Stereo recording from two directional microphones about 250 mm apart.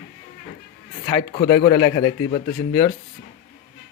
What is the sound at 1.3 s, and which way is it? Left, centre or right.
Speech, centre.